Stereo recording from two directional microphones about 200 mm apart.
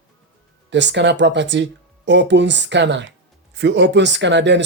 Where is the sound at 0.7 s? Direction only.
60° right (ahead or behind).